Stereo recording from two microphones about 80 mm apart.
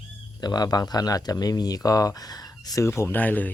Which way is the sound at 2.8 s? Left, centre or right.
Left.